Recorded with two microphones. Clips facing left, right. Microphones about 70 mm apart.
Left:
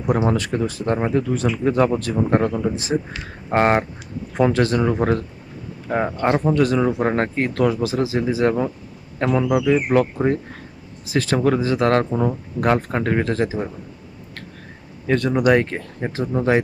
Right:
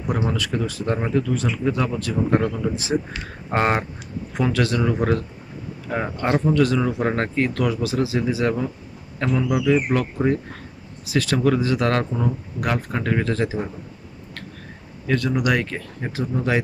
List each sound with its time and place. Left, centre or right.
0.3 s speech: left
2.9 s speech: centre
3.5 s speech: left
9.5 s speech: centre
15.0 s speech: left